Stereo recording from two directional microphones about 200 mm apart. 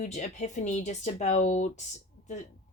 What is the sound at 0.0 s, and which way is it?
A woman's voice, 35° left (ahead or behind).